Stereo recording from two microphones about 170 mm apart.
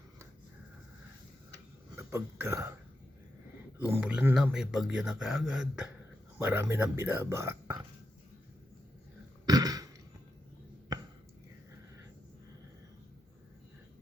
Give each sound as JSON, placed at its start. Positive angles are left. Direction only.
{"t": 2.0, "sound": "speech", "side_deg": -15}
{"t": 3.8, "sound": "speech", "side_deg": -10}
{"t": 9.5, "sound": "a sound", "side_deg": -20}